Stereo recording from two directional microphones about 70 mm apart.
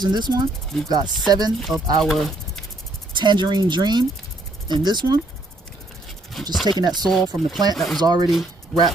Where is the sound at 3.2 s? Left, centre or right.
Right.